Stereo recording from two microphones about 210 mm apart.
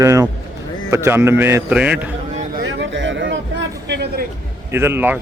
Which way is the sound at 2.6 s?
60° right (ahead or behind).